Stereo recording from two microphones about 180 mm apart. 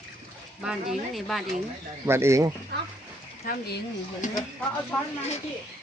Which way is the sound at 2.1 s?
15° right (ahead or behind).